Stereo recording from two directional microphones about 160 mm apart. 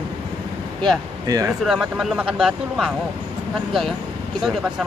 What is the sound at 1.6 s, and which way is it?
Speech, 5° right (ahead or behind).